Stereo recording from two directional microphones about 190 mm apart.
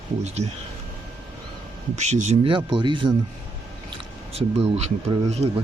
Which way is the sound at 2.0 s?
35° right (ahead or behind).